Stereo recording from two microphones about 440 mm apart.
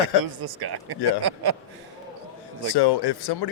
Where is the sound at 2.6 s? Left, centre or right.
Left.